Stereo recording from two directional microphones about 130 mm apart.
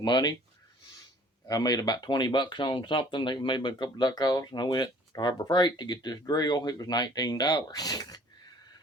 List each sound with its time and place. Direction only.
0.0 s speech: 30° left (ahead or behind)
1.5 s speech: 30° left (ahead or behind)